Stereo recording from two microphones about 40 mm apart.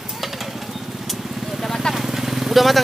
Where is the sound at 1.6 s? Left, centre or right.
Centre.